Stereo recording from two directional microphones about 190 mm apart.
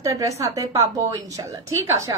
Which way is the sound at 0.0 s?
15° right (ahead or behind).